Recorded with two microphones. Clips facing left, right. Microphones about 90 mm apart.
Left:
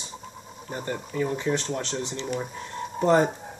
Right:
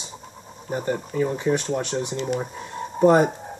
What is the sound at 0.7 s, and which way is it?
Speech, 20° right (ahead or behind).